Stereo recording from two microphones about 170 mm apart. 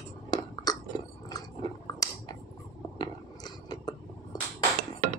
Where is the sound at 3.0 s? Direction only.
25° left (ahead or behind).